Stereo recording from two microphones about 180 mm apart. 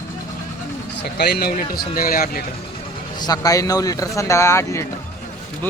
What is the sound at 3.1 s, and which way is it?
Speech, 20° left (ahead or behind).